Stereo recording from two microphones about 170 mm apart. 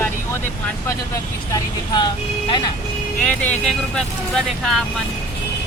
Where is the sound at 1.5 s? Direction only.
25° left (ahead or behind).